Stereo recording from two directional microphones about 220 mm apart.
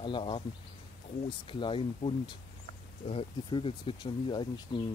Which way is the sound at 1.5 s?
25° left (ahead or behind).